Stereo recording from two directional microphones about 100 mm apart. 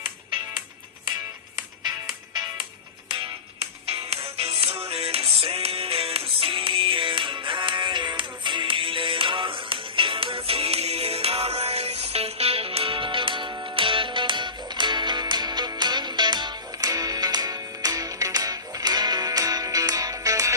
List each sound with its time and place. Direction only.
1.5 s music: 45° right (ahead or behind)
3.6 s music: 80° right; by 20.5 s 35° right (ahead or behind)